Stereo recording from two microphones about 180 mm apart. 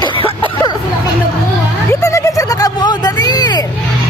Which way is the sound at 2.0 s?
15° left (ahead or behind).